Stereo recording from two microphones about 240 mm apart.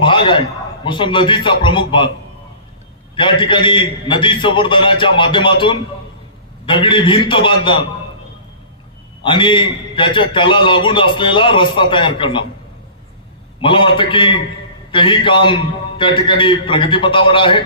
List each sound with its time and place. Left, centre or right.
0.0 s a sound: centre
0.9 s a man's voice: centre
3.2 s a man's voice: centre
9.2 s a man's voice: centre
13.6 s a man's voice: left